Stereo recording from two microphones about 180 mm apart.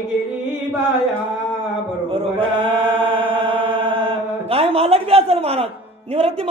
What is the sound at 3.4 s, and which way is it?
Chant, 30° right (ahead or behind).